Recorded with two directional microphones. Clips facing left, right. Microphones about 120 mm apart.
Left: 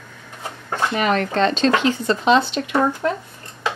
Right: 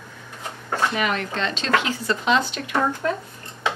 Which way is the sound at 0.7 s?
35° left (ahead or behind).